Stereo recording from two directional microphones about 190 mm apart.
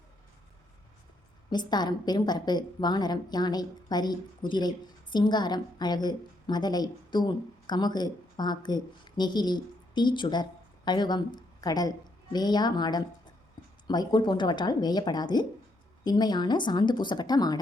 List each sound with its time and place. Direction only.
1.5 s a woman's voice: 20° left (ahead or behind)